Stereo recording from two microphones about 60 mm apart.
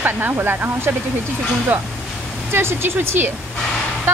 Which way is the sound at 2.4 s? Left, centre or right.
Right.